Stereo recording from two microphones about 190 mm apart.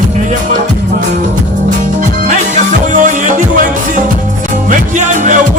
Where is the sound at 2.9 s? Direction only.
45° right (ahead or behind).